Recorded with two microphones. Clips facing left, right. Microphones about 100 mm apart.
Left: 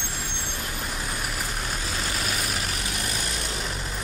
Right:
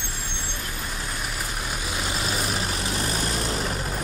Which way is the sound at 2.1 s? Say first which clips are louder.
Right 4 dB; 25° right (ahead or behind).